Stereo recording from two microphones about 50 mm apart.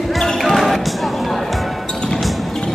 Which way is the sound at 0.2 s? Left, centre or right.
Centre.